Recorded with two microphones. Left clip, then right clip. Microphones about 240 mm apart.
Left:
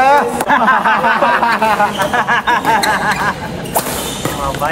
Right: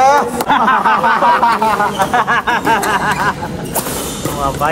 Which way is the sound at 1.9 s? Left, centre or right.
Centre.